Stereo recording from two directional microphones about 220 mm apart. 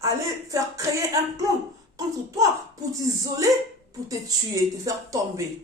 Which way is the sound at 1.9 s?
15° right (ahead or behind).